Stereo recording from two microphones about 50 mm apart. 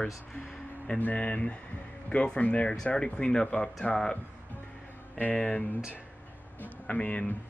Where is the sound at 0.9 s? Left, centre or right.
Left; by 4.2 s centre.